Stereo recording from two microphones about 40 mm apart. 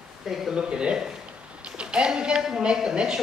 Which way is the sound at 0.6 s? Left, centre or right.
Right.